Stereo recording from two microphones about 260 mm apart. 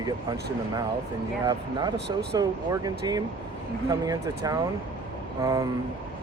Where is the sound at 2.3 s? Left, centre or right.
Centre.